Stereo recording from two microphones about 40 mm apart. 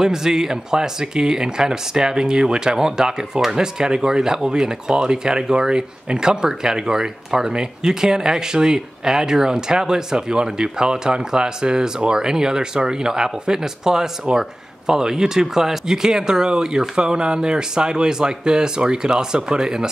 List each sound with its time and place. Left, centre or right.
0.0 s speech: centre